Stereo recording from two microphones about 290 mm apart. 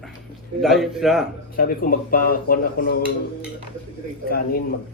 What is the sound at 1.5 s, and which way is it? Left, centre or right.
Speech, left.